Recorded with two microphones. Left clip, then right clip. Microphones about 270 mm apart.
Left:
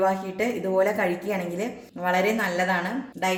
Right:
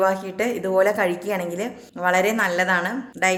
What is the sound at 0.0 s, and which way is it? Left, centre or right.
A woman's voice, right.